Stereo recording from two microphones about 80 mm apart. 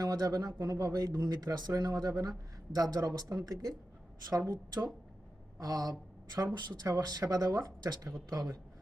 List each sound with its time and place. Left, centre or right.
0.0 s speech: right
4.3 s a woman's voice: right
5.5 s speech: right